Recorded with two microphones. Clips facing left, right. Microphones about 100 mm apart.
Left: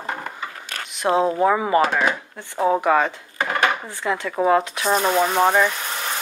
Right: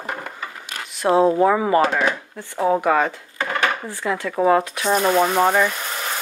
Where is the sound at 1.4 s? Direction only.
25° left (ahead or behind).